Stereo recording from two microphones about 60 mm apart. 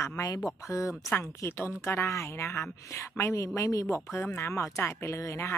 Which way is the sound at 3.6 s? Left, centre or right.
Left.